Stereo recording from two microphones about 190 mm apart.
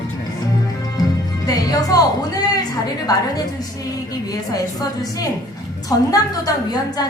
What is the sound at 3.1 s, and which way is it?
Music, 20° left (ahead or behind).